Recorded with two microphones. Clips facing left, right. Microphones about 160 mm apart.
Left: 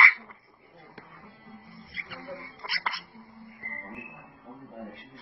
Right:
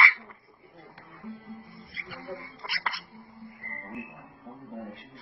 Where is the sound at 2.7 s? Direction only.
Centre (ahead or behind).